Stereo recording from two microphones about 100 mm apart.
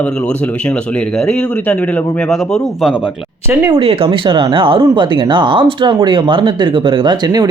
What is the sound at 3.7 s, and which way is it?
Speech, 65° right (ahead or behind).